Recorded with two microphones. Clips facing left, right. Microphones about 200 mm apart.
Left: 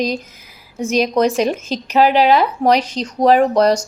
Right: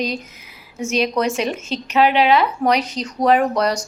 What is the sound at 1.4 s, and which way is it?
Speech, 35° left (ahead or behind).